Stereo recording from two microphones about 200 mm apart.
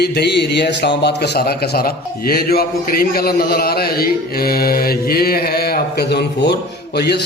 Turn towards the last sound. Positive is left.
turn(degrees=55)  # may be behind; listen again after turning